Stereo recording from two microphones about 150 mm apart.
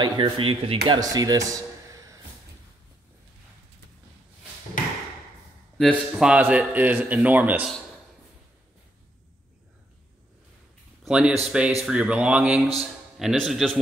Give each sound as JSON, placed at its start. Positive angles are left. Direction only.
{"t": 0.0, "sound": "speech", "side_deg": -30}
{"t": 0.8, "sound": "speech", "side_deg": -25}
{"t": 5.8, "sound": "a man's voice", "side_deg": 0}
{"t": 11.1, "sound": "a man's voice", "side_deg": -5}